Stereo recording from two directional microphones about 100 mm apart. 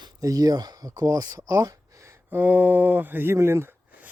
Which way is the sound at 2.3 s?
15° right (ahead or behind).